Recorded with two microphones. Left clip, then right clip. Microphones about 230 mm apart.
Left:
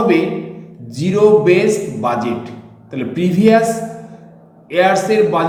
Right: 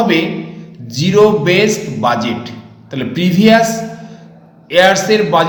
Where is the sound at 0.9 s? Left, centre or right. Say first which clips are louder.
Right 1 dB; centre.